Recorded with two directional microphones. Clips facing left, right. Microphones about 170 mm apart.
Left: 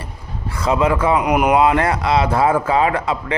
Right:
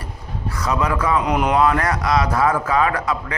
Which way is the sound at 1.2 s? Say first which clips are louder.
Left 3 dB; 10° left (ahead or behind).